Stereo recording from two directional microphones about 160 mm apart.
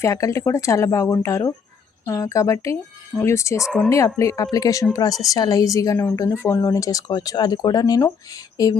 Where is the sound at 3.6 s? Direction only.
5° left (ahead or behind).